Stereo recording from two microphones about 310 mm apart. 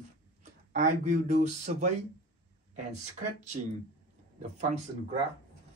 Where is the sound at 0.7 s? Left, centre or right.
Right.